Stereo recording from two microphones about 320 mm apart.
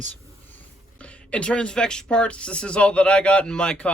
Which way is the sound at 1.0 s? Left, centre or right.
Centre.